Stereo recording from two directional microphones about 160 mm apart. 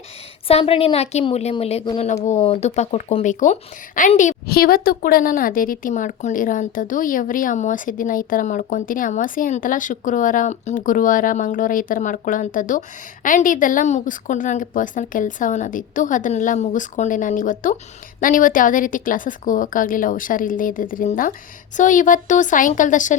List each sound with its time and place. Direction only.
0.4 s a woman's voice: 35° left (ahead or behind)
3.4 s speech: 55° left (ahead or behind)
4.4 s a woman's voice: 70° left (ahead or behind); by 23.1 s 50° left (ahead or behind)